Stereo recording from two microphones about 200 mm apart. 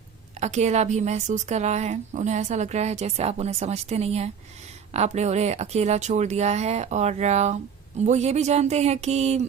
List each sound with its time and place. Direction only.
0.3 s a woman's voice: 35° right (ahead or behind)